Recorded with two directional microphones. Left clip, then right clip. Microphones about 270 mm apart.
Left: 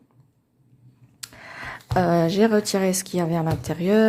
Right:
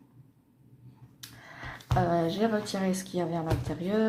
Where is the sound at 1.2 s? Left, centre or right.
Left.